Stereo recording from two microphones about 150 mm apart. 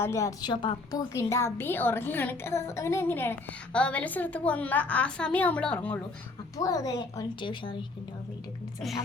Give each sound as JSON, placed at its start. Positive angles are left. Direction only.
{"t": 0.0, "sound": "a woman's voice", "side_deg": 20}
{"t": 6.6, "sound": "a woman's voice", "side_deg": 25}